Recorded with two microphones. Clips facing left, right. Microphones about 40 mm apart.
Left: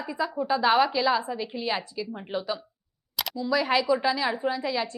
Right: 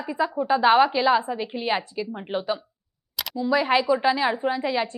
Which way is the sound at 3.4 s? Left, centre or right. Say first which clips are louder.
Right 3 dB; right.